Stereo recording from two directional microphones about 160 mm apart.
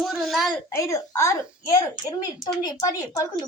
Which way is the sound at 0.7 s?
20° left (ahead or behind).